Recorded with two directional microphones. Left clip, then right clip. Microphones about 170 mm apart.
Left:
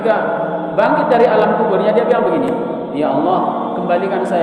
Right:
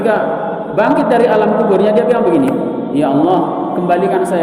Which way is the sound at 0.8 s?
50° right (ahead or behind).